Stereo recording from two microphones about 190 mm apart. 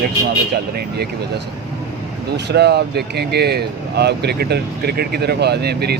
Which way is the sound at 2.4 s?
60° right (ahead or behind).